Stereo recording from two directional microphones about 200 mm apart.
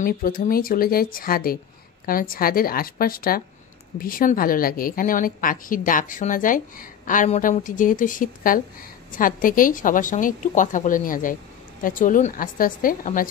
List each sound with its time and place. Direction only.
0.0 s a woman's voice: 45° left (ahead or behind)